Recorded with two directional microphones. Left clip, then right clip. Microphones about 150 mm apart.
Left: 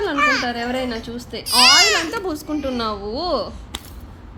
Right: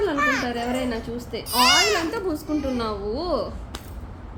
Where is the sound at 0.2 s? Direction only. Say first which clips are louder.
Left 8 dB; 15° right (ahead or behind).